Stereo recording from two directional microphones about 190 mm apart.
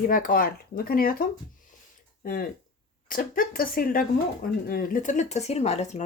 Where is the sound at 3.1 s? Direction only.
45° left (ahead or behind).